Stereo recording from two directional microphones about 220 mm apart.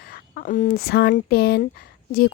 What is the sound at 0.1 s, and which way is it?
Speech, 40° left (ahead or behind).